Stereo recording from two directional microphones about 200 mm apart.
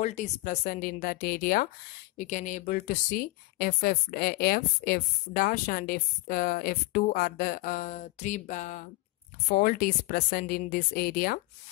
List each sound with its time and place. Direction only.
0.0 s speech: 35° left (ahead or behind)